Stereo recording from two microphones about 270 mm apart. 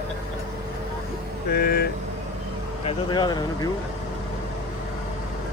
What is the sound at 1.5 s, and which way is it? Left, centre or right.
Speech, left.